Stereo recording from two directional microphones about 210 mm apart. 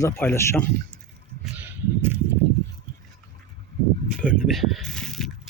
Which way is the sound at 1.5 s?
10° right (ahead or behind).